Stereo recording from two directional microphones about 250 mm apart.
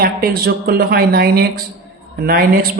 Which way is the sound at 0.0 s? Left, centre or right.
Right.